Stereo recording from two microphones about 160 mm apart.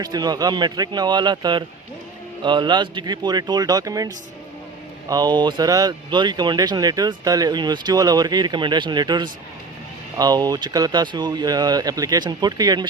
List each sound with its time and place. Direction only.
0.0 s speech: 25° right (ahead or behind)